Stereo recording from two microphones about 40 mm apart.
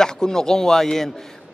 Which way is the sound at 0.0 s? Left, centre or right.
Centre.